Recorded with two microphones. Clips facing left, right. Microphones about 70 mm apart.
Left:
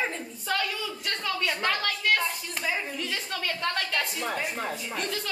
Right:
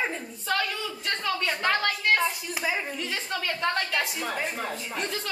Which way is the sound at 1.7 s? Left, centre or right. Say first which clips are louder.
Right 4 dB; right.